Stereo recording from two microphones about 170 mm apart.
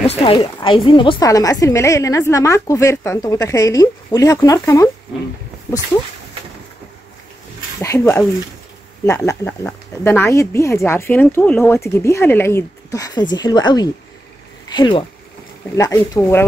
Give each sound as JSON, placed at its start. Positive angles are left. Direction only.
{"t": 0.0, "sound": "a woman's voice", "side_deg": 35}
{"t": 7.8, "sound": "a woman's voice", "side_deg": 15}